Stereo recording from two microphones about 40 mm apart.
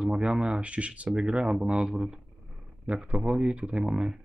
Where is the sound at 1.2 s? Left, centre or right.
Centre.